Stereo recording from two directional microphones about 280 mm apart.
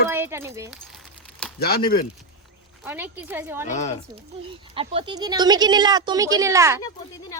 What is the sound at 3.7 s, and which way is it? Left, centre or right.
Speech, left.